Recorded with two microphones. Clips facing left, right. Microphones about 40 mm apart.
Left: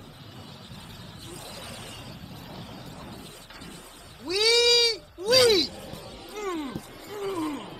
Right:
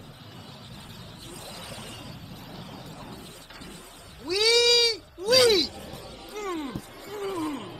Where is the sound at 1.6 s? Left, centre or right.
Right.